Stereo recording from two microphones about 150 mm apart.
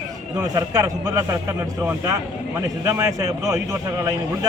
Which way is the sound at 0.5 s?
25° right (ahead or behind).